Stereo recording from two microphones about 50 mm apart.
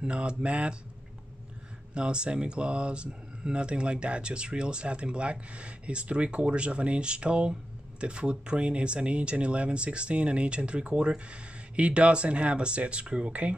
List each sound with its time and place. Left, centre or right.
0.0 s speech: right
2.0 s speech: centre